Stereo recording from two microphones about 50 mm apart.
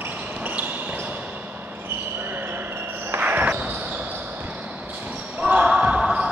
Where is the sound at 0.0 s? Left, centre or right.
Right.